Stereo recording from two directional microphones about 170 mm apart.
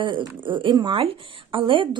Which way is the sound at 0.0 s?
30° right (ahead or behind).